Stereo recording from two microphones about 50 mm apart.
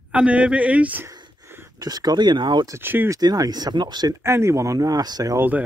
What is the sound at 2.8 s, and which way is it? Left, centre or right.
Speech, right.